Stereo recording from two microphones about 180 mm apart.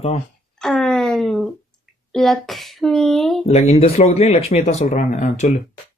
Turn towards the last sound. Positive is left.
turn(degrees=45)  # may be behind; listen again after turning